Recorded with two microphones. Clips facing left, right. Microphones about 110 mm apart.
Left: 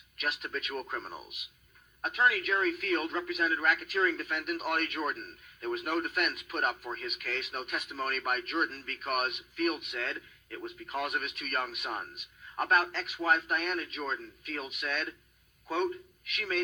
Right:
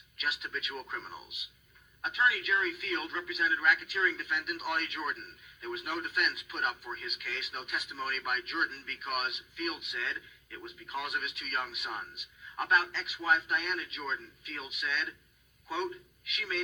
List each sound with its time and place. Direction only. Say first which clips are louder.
0.2 s speech: left 2 dB; 50° left (ahead or behind)